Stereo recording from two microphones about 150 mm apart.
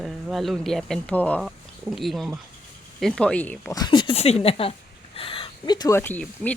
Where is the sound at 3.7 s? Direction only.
30° left (ahead or behind).